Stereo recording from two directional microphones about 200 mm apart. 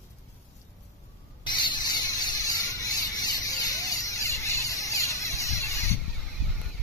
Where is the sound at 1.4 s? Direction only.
20° left (ahead or behind).